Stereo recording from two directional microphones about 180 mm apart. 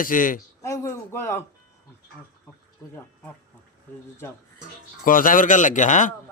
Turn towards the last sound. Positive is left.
turn(degrees=45)  # may be behind; listen again after turning